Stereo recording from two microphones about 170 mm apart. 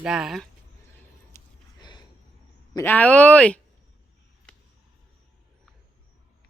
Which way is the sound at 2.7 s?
10° left (ahead or behind).